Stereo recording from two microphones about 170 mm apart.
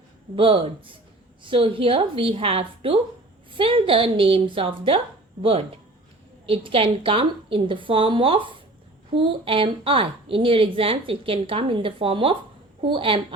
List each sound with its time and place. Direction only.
0.3 s a woman's voice: 35° right (ahead or behind)